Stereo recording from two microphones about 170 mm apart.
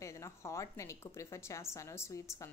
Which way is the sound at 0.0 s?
15° left (ahead or behind).